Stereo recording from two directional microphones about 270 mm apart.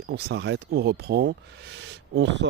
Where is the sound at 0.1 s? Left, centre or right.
Right.